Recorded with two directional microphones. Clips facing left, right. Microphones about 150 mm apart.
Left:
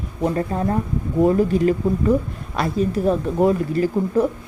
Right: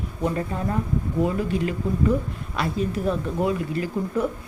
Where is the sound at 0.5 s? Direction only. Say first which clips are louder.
Left 4 dB; 35° left (ahead or behind).